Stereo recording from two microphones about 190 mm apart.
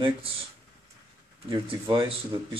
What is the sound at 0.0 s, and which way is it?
Speech, 30° right (ahead or behind).